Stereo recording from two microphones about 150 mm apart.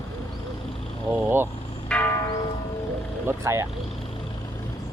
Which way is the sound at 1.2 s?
15° right (ahead or behind).